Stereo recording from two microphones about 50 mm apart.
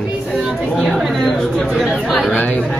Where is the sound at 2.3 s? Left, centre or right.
Left.